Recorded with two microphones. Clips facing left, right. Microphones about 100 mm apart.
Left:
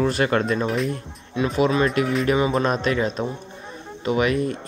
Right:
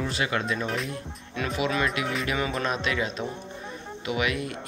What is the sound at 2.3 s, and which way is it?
Music, 25° left (ahead or behind).